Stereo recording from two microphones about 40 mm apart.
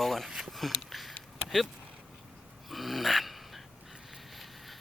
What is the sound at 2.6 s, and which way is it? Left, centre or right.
Dog, centre.